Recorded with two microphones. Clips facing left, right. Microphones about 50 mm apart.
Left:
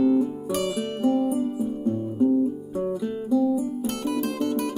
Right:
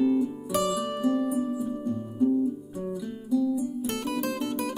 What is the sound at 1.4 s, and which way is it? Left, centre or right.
Music, left.